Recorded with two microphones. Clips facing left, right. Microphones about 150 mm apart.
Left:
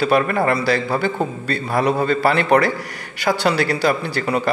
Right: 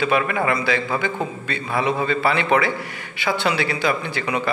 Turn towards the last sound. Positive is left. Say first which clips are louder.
# left 3 dB
turn(degrees=40)  # may be behind; listen again after turning